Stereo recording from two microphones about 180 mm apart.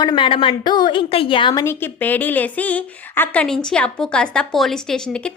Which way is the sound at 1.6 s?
10° left (ahead or behind).